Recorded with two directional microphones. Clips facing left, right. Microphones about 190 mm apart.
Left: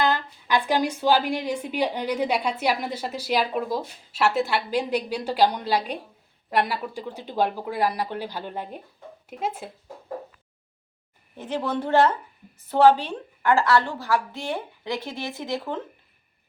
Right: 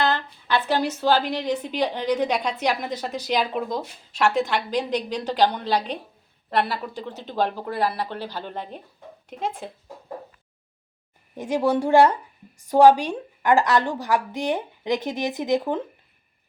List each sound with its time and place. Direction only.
0.0 s a woman's voice: 10° left (ahead or behind)
11.3 s a woman's voice: 10° right (ahead or behind)